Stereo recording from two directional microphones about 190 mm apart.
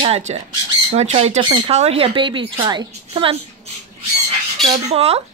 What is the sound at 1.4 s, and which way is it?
A woman's voice, 25° right (ahead or behind).